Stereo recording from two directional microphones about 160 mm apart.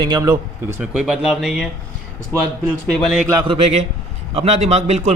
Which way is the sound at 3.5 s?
40° right (ahead or behind).